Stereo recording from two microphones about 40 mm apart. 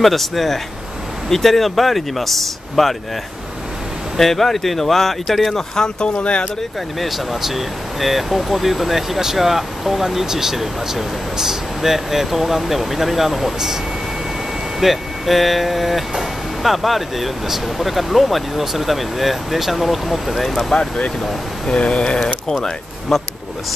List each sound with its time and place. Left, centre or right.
0.0 s speech: centre
4.2 s speech: centre
6.1 s speech: left
7.0 s speech: centre
14.8 s speech: centre
20.7 s speech: centre
22.5 s speech: centre